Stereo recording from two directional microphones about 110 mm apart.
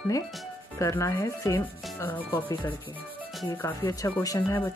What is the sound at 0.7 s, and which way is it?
Rub, 25° left (ahead or behind).